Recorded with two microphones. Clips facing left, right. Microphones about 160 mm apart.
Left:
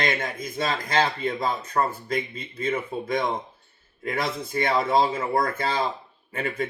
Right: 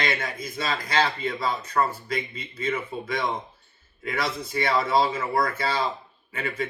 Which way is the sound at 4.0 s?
50° left (ahead or behind).